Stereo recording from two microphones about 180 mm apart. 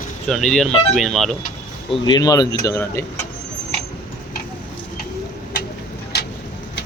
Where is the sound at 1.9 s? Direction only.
25° left (ahead or behind).